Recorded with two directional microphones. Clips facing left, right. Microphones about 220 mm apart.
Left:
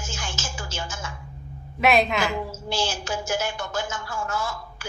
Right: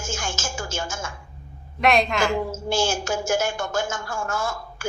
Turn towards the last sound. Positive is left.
turn(degrees=-45)  # may be behind; listen again after turning